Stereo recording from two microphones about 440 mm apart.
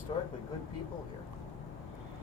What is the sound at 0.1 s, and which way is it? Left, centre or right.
Speech, centre.